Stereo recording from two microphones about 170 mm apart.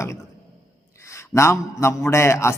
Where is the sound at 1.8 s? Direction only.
15° left (ahead or behind).